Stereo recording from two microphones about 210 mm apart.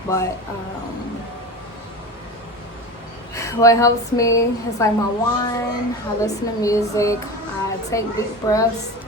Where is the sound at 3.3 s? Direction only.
15° left (ahead or behind).